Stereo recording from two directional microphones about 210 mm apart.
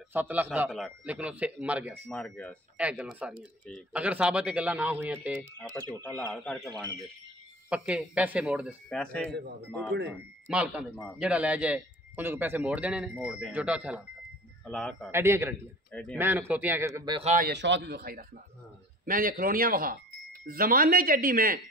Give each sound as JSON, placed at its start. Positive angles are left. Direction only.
{"t": 0.1, "sound": "speech", "side_deg": -10}
{"t": 2.0, "sound": "speech", "side_deg": 5}
{"t": 2.8, "sound": "speech", "side_deg": -5}
{"t": 5.6, "sound": "speech", "side_deg": 10}
{"t": 7.7, "sound": "speech", "side_deg": -5}
{"t": 10.5, "sound": "speech", "side_deg": -5}
{"t": 15.0, "sound": "speech", "side_deg": -10}
{"t": 15.9, "sound": "speech", "side_deg": 5}
{"t": 16.2, "sound": "speech", "side_deg": -10}
{"t": 17.2, "sound": "speech", "side_deg": -35}
{"t": 17.5, "sound": "speech", "side_deg": -60}